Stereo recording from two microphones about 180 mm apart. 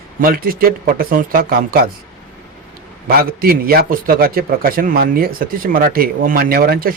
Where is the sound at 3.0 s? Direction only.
55° right (ahead or behind).